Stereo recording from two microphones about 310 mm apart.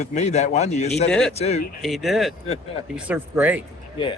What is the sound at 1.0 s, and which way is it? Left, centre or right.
Speech, centre.